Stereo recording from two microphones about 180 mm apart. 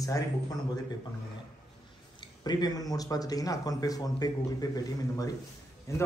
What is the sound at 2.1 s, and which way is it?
A man's voice, 25° left (ahead or behind).